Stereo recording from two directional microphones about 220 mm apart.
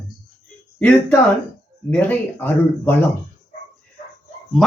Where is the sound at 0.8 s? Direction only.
10° left (ahead or behind).